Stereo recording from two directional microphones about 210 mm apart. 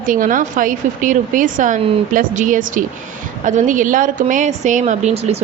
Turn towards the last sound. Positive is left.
turn(degrees=-30)  # may be behind; listen again after turning